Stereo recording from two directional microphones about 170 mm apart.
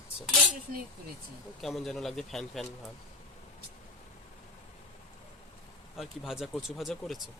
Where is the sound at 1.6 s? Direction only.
Centre (ahead or behind).